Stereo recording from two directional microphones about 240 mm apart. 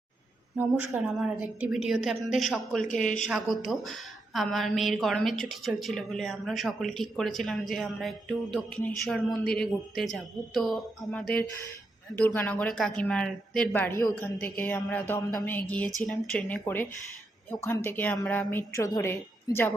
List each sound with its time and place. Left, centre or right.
0.5 s a woman's voice: centre
2.8 s speech: left
3.2 s a woman's voice: centre